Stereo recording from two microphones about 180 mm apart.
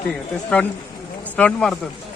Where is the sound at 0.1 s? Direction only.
5° left (ahead or behind).